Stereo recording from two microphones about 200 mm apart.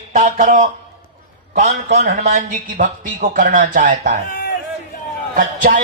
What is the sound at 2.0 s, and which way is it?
Speech, 40° right (ahead or behind).